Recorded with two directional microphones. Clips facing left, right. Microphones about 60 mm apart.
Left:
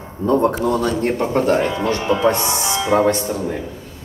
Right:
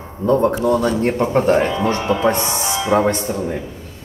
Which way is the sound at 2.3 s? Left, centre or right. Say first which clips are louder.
Even; right.